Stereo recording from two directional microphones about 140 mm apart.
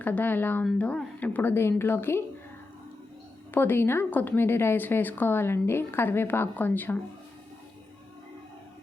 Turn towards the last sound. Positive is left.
turn(degrees=15)  # may be behind; listen again after turning